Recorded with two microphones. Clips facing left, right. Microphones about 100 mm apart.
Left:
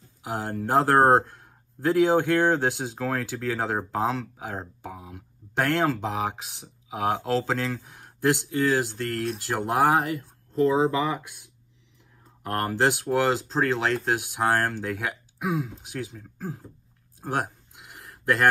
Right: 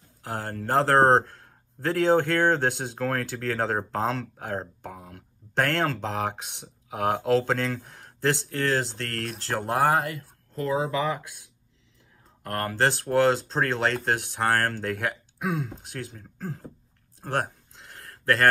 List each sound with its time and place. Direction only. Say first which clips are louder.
0.2 s speech: left 3 dB; 15° left (ahead or behind)
12.4 s speech: left 1 dB; 20° left (ahead or behind)
17.2 s a sound: even; 10° left (ahead or behind)